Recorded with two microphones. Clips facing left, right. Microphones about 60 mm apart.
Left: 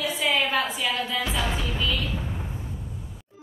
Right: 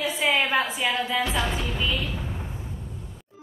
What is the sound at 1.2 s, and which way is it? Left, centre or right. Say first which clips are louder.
Music: right 1 dB; centre.